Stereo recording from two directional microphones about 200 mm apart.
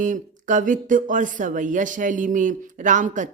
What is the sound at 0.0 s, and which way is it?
Speech, 40° right (ahead or behind).